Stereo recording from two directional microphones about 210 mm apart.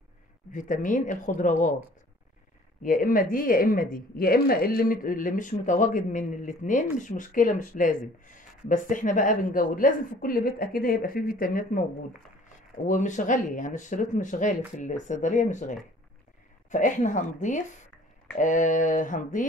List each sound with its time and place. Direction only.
0.5 s speech: 40° left (ahead or behind)
2.8 s speech: 40° left (ahead or behind)
12.8 s speech: 35° left (ahead or behind)